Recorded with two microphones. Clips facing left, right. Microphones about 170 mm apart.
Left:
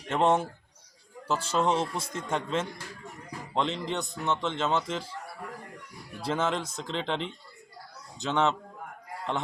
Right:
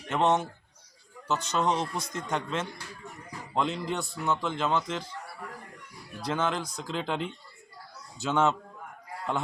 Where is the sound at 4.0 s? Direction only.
20° left (ahead or behind).